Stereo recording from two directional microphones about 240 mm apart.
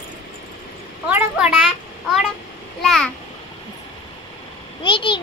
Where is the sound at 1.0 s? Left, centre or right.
Centre.